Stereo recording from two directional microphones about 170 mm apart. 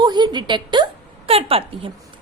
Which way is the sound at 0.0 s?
25° right (ahead or behind).